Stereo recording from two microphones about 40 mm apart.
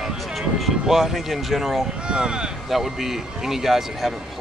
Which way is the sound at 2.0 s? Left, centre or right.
Right.